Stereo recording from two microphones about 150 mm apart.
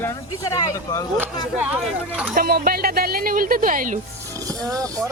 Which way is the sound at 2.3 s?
80° right.